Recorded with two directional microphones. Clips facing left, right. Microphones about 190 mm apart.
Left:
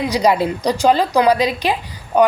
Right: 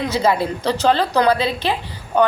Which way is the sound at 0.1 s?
15° left (ahead or behind).